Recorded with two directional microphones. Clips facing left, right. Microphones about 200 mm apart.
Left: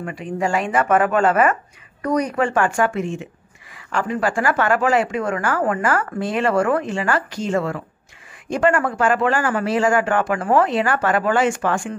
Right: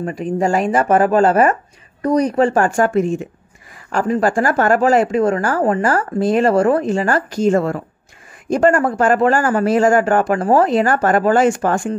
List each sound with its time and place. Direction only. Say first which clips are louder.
0.0 s a woman's voice: right 5 dB; 40° right (ahead or behind)